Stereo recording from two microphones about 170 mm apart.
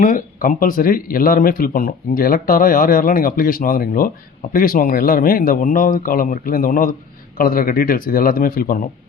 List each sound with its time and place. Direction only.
0.0 s speech: 55° left (ahead or behind)